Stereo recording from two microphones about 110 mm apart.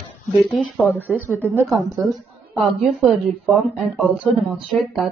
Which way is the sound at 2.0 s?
Centre (ahead or behind).